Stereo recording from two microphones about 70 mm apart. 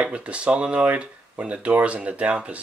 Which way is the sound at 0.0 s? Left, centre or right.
Centre.